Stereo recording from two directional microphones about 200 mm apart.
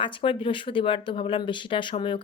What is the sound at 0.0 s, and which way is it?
Speech, 25° left (ahead or behind).